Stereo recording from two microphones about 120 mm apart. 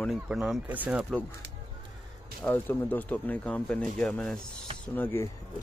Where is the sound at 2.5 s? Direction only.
15° left (ahead or behind).